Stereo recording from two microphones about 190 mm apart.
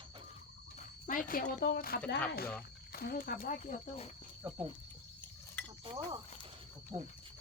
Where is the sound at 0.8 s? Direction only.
45° left (ahead or behind).